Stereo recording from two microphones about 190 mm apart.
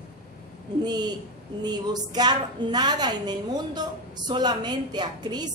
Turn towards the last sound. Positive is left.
turn(degrees=-20)  # may be behind; listen again after turning